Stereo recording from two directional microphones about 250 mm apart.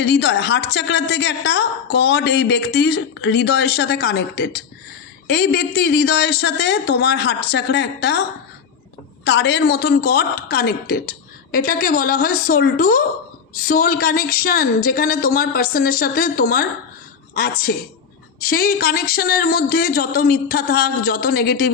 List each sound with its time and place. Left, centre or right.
0.0 s a woman's voice: left